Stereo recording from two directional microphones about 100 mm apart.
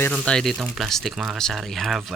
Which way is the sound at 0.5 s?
Centre (ahead or behind).